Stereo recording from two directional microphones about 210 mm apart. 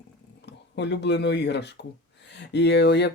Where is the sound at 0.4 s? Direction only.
55° left (ahead or behind).